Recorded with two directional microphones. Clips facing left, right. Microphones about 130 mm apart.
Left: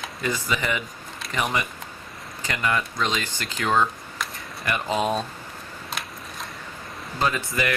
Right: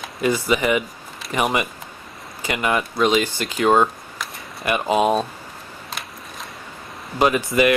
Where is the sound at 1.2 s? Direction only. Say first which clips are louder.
Right 6 dB; centre (ahead or behind).